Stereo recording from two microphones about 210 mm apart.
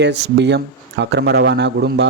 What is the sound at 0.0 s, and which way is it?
Speech, 55° right (ahead or behind).